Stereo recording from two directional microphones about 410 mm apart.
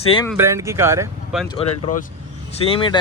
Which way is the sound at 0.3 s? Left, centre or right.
Centre.